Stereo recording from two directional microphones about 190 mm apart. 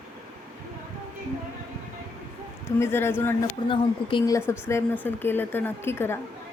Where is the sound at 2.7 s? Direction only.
15° left (ahead or behind).